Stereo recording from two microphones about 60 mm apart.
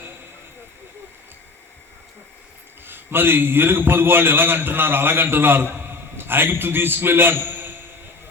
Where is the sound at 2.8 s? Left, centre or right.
Right.